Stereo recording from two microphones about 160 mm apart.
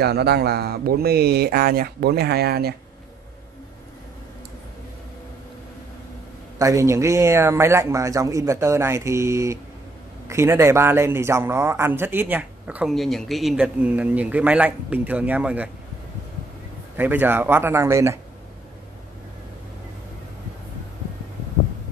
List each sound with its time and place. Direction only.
0.0 s speech: 90° right
6.6 s a man's voice: 20° right (ahead or behind)
16.9 s a man's voice: 10° right (ahead or behind)